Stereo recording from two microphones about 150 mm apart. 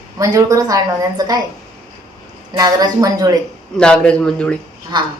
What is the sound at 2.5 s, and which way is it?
Speech, 25° right (ahead or behind).